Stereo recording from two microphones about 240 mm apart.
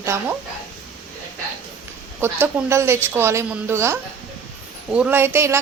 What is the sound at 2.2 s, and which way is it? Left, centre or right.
Speech, centre.